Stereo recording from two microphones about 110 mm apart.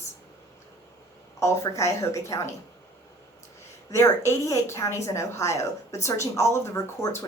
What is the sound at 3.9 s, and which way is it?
A woman's voice, 25° left (ahead or behind).